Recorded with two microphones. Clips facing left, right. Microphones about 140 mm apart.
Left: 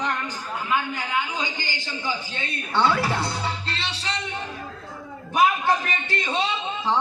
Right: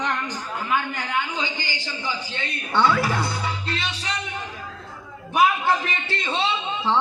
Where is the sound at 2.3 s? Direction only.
25° left (ahead or behind).